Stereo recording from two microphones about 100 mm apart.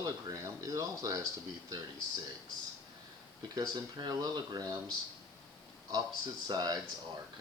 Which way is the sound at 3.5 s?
40° right (ahead or behind).